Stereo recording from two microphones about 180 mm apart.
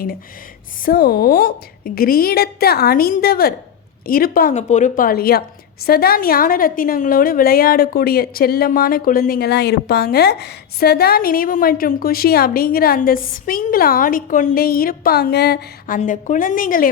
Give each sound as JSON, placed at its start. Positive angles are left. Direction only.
{"t": 0.9, "sound": "a woman's voice", "side_deg": 55}
{"t": 16.0, "sound": "a woman's voice", "side_deg": 45}